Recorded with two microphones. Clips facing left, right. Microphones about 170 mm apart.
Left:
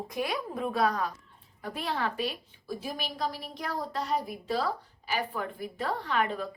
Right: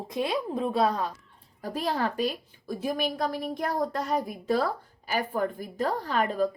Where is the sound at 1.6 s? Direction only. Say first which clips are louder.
Right 4 dB; 40° right (ahead or behind).